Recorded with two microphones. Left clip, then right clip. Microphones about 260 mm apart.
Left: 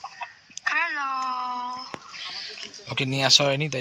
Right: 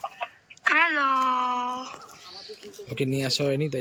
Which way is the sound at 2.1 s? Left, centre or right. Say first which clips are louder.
Left 7 dB; centre.